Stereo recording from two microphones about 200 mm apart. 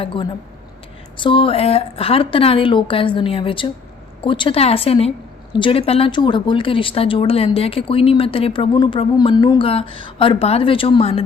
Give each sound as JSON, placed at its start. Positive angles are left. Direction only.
{"t": 0.0, "sound": "speech", "side_deg": 25}